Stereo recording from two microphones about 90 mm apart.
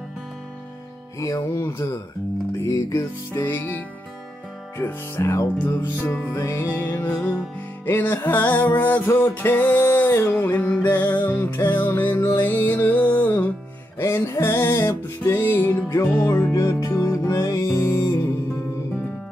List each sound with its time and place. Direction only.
1.2 s music: 40° left (ahead or behind)
1.7 s music: 30° left (ahead or behind)
13.9 s music: 35° left (ahead or behind)